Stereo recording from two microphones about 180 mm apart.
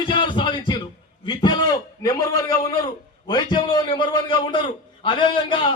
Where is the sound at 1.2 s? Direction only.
25° left (ahead or behind).